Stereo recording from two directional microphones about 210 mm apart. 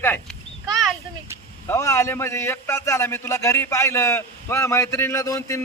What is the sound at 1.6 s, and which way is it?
A man's voice, 15° left (ahead or behind).